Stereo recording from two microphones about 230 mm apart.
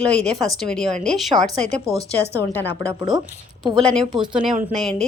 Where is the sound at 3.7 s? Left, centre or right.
Centre.